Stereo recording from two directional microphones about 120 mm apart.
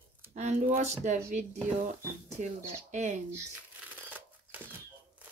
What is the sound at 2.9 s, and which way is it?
Speech, 80° right.